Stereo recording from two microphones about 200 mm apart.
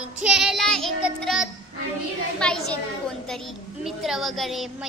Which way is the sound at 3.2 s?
Centre (ahead or behind).